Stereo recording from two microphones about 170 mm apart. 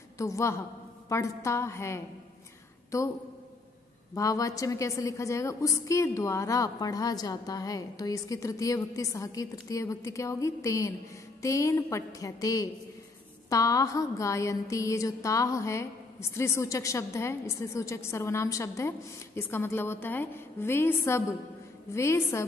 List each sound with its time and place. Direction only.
0.2 s a woman's voice: 15° left (ahead or behind)
4.1 s a woman's voice: 20° left (ahead or behind)